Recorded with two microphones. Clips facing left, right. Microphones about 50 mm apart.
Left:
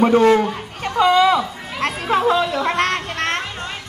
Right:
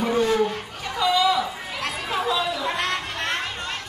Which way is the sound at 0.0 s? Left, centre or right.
Left.